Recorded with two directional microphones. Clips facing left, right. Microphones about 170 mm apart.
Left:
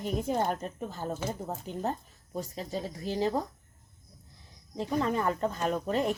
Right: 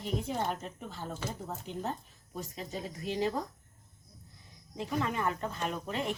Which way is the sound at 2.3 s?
35° left (ahead or behind).